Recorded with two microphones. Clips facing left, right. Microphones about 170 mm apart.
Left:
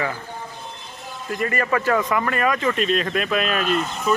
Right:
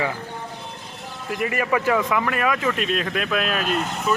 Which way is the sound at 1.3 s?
10° right (ahead or behind).